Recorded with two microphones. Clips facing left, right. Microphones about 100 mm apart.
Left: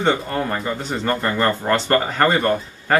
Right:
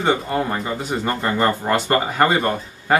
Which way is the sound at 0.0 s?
15° right (ahead or behind).